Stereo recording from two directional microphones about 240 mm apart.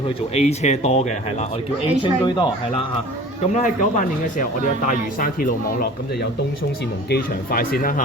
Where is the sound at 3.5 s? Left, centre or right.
Left.